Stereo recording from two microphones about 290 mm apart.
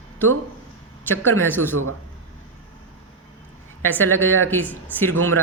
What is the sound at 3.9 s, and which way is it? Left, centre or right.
Speech, centre.